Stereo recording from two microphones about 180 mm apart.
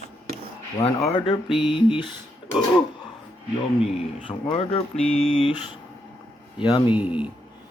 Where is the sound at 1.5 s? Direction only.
30° left (ahead or behind).